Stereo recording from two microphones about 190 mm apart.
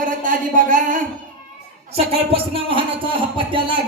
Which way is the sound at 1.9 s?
30° right (ahead or behind).